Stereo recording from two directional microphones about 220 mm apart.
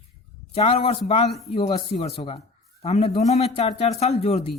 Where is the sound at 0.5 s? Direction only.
25° left (ahead or behind).